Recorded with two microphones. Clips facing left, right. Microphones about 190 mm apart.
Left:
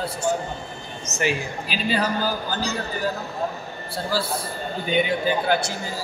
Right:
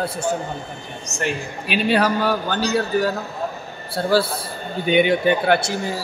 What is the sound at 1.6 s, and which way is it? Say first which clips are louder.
A man's voice: right 7 dB; 70° right (ahead or behind).